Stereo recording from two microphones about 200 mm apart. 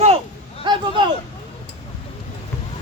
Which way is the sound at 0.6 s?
25° right (ahead or behind).